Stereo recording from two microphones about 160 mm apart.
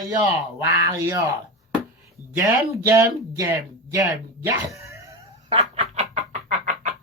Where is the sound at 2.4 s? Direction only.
20° right (ahead or behind).